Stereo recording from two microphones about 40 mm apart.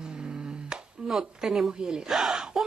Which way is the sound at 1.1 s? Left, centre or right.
Centre.